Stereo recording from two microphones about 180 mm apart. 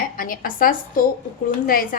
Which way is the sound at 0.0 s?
50° left (ahead or behind).